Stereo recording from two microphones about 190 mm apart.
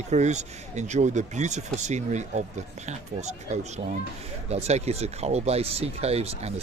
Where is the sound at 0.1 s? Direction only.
40° right (ahead or behind).